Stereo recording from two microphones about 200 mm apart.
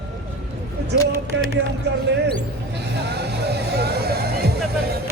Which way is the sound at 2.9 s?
55° right (ahead or behind).